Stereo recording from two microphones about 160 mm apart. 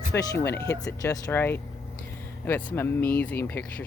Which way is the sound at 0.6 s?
90° left.